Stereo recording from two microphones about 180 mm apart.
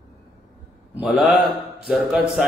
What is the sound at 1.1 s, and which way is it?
Speech, centre (ahead or behind).